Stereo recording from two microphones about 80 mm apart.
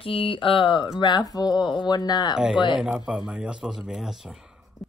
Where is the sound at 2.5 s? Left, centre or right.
Left.